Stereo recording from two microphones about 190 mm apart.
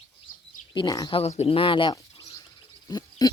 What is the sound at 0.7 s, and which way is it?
Speech, 20° left (ahead or behind).